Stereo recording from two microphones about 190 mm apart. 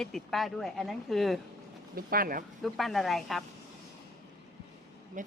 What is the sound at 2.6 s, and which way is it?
Speech, centre (ahead or behind).